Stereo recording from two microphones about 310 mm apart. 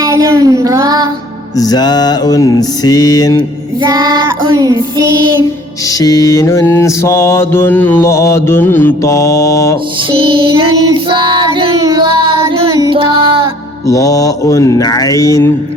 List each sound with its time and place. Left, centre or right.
0.0 s child singing: centre
1.5 s mantra: centre
3.8 s child singing: centre
5.9 s mantra: centre
10.2 s child singing: centre
13.8 s mantra: centre